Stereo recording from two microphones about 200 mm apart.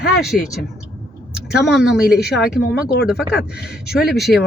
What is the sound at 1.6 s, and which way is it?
Speech, 5° right (ahead or behind).